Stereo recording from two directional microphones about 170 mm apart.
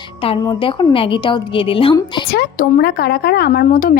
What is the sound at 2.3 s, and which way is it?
Speech, 70° left (ahead or behind).